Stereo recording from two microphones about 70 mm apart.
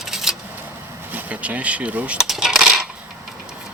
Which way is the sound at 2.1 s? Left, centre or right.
Centre.